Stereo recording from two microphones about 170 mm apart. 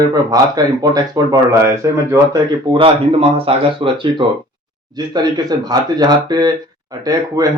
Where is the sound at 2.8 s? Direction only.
35° right (ahead or behind).